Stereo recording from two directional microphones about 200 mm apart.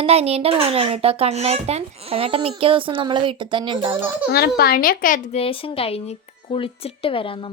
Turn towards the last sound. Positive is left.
turn(degrees=25)  # may be behind; listen again after turning